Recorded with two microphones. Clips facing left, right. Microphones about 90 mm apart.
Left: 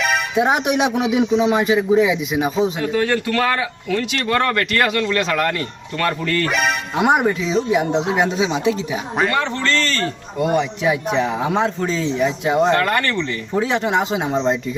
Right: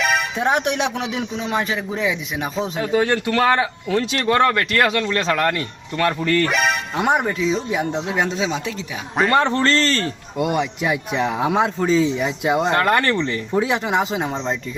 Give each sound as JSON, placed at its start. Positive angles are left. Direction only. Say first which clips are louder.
{"t": 0.0, "sound": "speech", "louder": "left 2 dB", "side_deg": 5}
{"t": 3.0, "sound": "speech", "louder": "right 1 dB", "side_deg": -25}
{"t": 6.4, "sound": "speech", "louder": "even", "side_deg": 0}
{"t": 8.0, "sound": "speech", "louder": "left 3 dB", "side_deg": 15}
{"t": 9.3, "sound": "a man's voice", "louder": "right 3 dB", "side_deg": -40}
{"t": 10.3, "sound": "speech", "louder": "left 2 dB", "side_deg": -5}
{"t": 12.7, "sound": "speech", "louder": "right 1 dB", "side_deg": -30}
{"t": 13.6, "sound": "speech", "louder": "left 1 dB", "side_deg": -5}